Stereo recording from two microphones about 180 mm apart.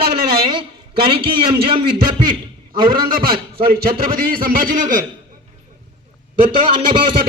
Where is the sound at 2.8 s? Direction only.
55° right (ahead or behind).